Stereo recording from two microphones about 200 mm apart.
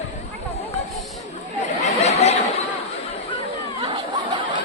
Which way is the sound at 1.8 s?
35° left (ahead or behind).